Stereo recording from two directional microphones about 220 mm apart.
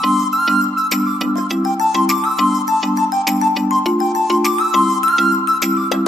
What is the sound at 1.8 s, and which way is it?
Music, centre (ahead or behind).